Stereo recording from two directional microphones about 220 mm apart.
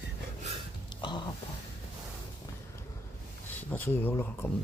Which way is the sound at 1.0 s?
20° left (ahead or behind).